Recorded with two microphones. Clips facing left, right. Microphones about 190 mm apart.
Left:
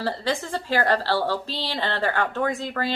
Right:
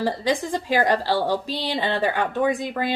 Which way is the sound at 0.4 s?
15° right (ahead or behind).